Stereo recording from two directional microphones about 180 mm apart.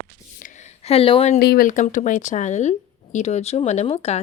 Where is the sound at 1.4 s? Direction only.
55° left (ahead or behind).